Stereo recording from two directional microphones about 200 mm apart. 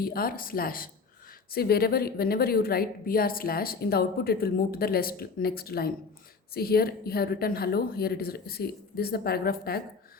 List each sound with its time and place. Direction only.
0.0 s a woman's voice: 50° left (ahead or behind)